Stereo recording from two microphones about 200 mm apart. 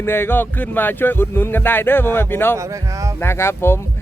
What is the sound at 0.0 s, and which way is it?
A man's voice, 10° left (ahead or behind).